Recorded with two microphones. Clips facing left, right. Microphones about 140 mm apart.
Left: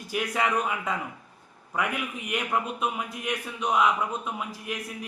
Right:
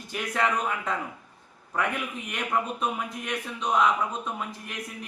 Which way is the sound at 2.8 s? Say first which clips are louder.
Even; 10° left (ahead or behind).